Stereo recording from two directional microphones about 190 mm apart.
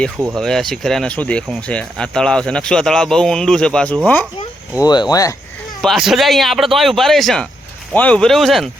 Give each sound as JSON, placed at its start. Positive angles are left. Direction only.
{"t": 0.3, "sound": "speech", "side_deg": 0}
{"t": 4.8, "sound": "speech", "side_deg": 20}
{"t": 5.8, "sound": "speech", "side_deg": 0}